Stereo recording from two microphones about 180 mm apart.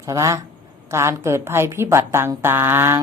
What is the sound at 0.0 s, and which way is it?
Speech, 15° right (ahead or behind).